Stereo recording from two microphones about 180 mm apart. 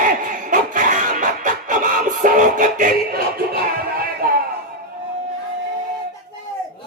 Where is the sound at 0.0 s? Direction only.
45° right (ahead or behind).